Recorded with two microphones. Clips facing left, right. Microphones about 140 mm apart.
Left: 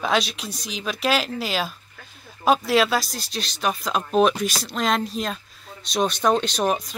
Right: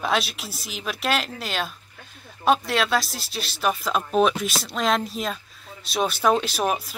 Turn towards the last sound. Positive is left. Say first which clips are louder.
# left 2 dB
turn(degrees=-5)  # may be behind; listen again after turning